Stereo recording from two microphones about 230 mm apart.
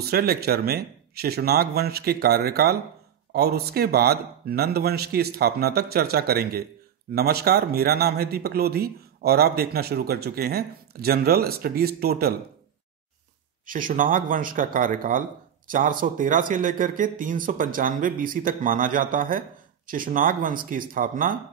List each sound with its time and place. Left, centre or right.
0.1 s speech: right
13.7 s speech: right